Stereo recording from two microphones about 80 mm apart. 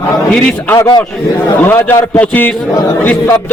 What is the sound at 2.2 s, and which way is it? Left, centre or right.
Speech, left.